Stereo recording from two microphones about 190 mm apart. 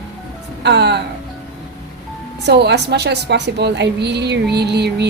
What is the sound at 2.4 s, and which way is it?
A woman's voice, 60° right (ahead or behind).